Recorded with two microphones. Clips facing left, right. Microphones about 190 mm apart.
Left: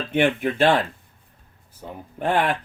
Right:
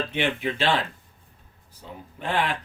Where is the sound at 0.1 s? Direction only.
50° left (ahead or behind).